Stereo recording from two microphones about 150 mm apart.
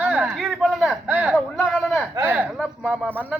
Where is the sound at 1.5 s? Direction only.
5° left (ahead or behind).